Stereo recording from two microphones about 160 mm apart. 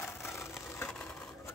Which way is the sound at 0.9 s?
5° left (ahead or behind).